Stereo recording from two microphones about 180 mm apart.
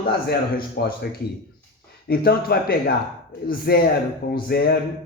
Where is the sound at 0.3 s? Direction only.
60° left (ahead or behind).